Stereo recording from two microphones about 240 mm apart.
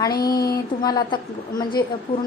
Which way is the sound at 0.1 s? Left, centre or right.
Left.